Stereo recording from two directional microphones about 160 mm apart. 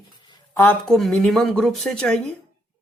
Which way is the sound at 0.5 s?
15° left (ahead or behind).